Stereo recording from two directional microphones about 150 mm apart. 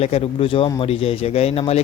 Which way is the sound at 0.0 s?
40° left (ahead or behind).